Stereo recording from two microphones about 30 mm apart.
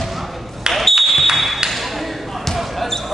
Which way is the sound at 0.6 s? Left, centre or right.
Right.